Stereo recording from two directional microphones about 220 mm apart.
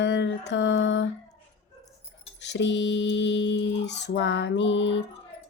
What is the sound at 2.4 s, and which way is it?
Speech, 55° left (ahead or behind).